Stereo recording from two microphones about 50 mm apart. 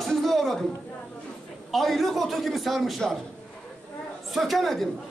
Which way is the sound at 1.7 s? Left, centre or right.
Centre.